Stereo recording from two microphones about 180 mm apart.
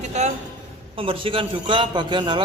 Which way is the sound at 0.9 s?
30° right (ahead or behind).